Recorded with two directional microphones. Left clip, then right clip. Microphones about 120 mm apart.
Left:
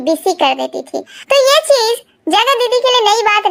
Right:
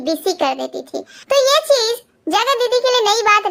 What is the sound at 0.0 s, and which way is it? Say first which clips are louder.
Speech: left 5 dB; 15° left (ahead or behind).